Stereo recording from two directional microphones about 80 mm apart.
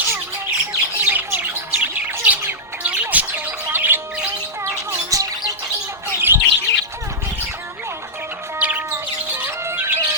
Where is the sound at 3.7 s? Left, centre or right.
Right.